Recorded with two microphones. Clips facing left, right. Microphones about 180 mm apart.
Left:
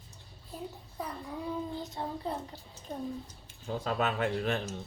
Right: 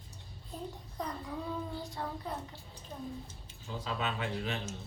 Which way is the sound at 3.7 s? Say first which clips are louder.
Left 5 dB; 50° left (ahead or behind).